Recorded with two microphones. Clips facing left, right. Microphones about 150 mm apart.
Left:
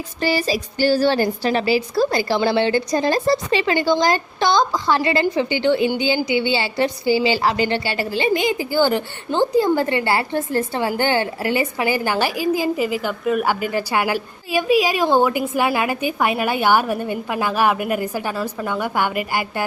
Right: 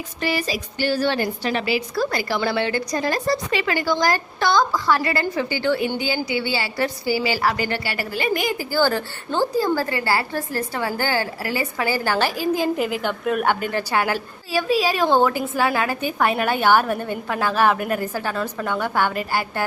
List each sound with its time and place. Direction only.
0.2 s a woman's voice: 30° left (ahead or behind); by 19.6 s 10° left (ahead or behind)